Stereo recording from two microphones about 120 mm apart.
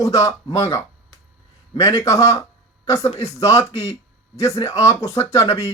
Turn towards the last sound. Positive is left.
turn(degrees=25)  # may be behind; listen again after turning